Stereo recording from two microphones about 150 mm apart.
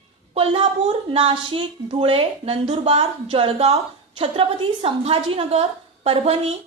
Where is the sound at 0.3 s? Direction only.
40° right (ahead or behind).